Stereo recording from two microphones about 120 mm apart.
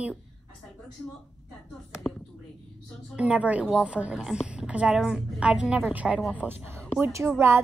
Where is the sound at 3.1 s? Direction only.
10° right (ahead or behind).